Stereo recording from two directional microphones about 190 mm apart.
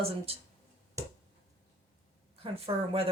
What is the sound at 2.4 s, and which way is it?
Speech, 30° right (ahead or behind).